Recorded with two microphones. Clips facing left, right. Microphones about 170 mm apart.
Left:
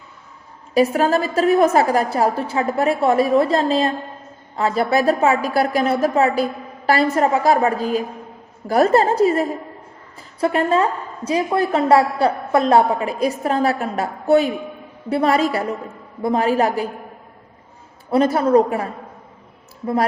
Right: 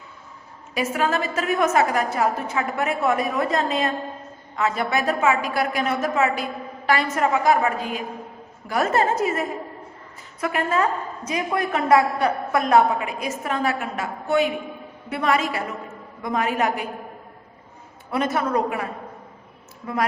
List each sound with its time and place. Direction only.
0.7 s a woman's voice: 35° left (ahead or behind)
18.1 s a woman's voice: 35° left (ahead or behind)